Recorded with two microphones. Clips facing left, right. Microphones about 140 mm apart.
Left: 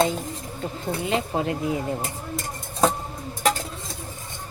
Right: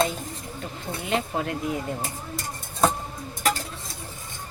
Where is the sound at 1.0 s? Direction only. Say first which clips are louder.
Left 1 dB; 25° left (ahead or behind).